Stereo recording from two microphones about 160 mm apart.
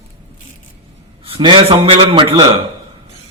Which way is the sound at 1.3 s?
30° right (ahead or behind).